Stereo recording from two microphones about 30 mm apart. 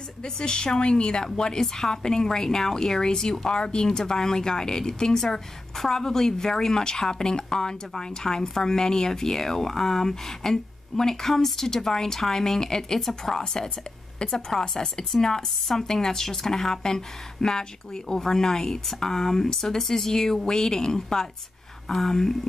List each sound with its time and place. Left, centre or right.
0.2 s a woman's voice: left